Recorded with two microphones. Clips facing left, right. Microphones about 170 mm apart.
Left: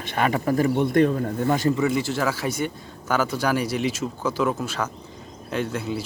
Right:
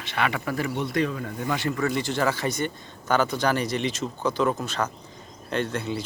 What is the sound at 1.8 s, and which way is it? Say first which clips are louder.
Speech: left 2 dB; 5° left (ahead or behind).